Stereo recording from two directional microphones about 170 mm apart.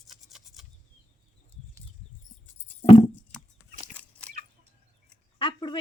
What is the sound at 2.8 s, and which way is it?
Patter, 30° left (ahead or behind).